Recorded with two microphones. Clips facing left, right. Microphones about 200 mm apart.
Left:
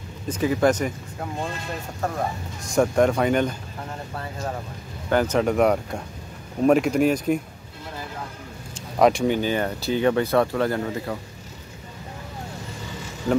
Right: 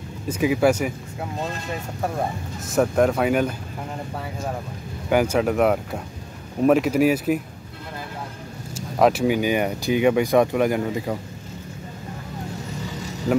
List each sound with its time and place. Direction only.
0.3 s speech: 10° right (ahead or behind)
2.6 s speech: 5° right (ahead or behind)
5.1 s speech: 10° right (ahead or behind)
8.7 s speech: 5° right (ahead or behind)